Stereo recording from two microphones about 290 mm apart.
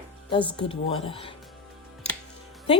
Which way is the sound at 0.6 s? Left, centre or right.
Centre.